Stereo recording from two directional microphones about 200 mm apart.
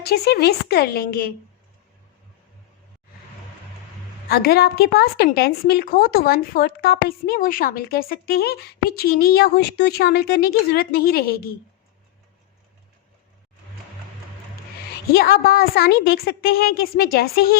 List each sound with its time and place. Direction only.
0.0 s a woman's voice: 55° left (ahead or behind)
4.3 s a woman's voice: 50° left (ahead or behind)
15.1 s a woman's voice: 50° left (ahead or behind)